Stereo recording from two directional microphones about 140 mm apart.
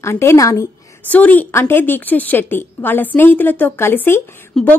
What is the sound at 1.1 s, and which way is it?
A woman's voice, 10° left (ahead or behind).